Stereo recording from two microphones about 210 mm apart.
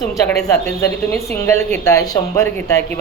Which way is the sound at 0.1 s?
15° left (ahead or behind).